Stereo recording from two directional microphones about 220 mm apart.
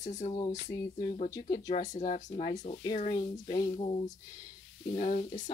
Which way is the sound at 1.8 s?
35° left (ahead or behind).